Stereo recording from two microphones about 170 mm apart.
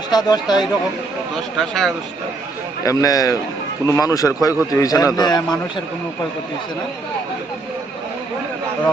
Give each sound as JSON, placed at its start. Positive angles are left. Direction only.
{"t": 0.1, "sound": "a man's voice", "side_deg": 25}
{"t": 1.5, "sound": "speech", "side_deg": 0}
{"t": 2.8, "sound": "a man's voice", "side_deg": 20}